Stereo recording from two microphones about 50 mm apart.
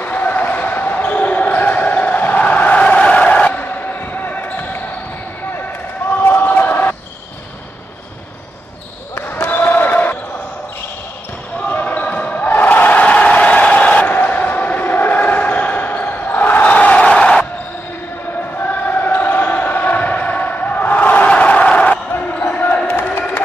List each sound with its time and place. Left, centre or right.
0.0 s basketball bounce: left
2.4 s a sound: left
2.8 s basketball bounce: left
6.0 s basketball bounce: left
9.5 s basketball bounce: left
11.6 s basketball bounce: left
13.0 s a sound: left
18.6 s chant: left
21.3 s crowd: left
22.1 s basketball bounce: left